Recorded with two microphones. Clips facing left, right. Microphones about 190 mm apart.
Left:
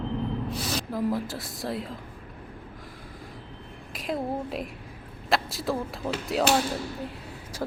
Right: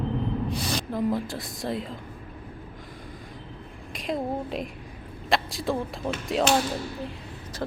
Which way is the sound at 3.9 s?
5° left (ahead or behind).